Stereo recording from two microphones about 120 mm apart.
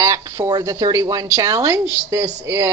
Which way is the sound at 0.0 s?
25° right (ahead or behind).